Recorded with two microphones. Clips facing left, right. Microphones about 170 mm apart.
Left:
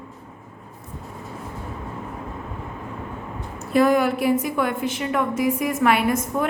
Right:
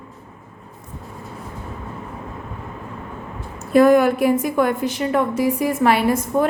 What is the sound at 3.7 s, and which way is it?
A woman's voice, 50° right (ahead or behind).